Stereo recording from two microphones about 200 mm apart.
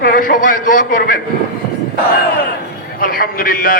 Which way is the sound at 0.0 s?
45° left (ahead or behind).